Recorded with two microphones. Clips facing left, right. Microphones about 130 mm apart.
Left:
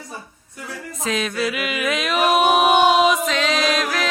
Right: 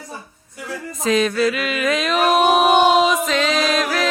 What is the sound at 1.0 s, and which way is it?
Music, centre (ahead or behind).